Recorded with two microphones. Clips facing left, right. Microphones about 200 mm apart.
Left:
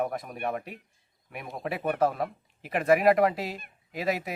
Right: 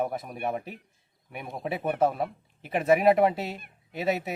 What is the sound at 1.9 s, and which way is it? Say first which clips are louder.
Speech: right 1 dB; 5° right (ahead or behind).